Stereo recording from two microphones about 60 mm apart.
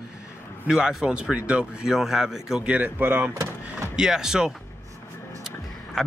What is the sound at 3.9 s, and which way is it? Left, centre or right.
Speech, centre.